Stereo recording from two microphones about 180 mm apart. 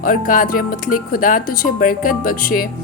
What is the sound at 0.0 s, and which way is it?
A woman's voice, 50° left (ahead or behind).